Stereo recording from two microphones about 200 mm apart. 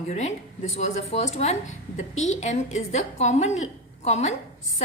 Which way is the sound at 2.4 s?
35° left (ahead or behind).